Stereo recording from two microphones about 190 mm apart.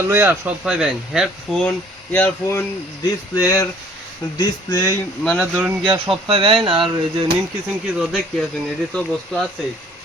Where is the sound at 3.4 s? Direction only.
20° left (ahead or behind).